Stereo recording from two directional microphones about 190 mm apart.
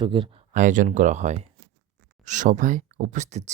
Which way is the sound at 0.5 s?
45° right (ahead or behind).